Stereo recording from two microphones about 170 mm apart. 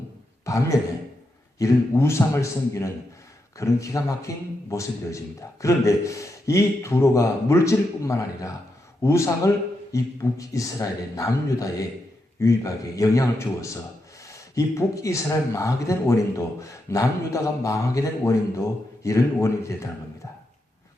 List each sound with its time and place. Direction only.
0.4 s a man's voice: 20° left (ahead or behind)